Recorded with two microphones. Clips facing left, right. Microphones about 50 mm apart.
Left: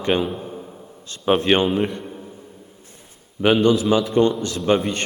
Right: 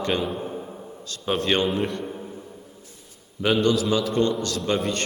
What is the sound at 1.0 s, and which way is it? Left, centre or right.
Speech, left.